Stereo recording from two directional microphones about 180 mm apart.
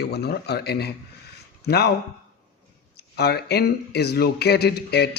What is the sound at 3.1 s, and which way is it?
A man's voice, 65° left (ahead or behind).